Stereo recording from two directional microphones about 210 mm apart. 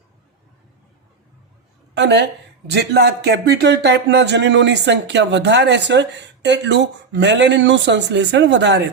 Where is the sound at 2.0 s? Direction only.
55° right (ahead or behind).